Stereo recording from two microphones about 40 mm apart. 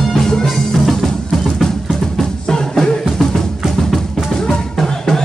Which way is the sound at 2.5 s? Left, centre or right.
Centre.